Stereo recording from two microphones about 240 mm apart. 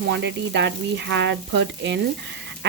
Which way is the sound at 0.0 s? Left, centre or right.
Right.